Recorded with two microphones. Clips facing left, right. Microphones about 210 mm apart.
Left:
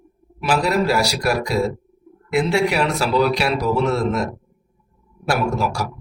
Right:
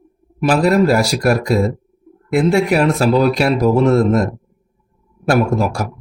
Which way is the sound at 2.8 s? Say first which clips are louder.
Right 5 dB; 50° right (ahead or behind).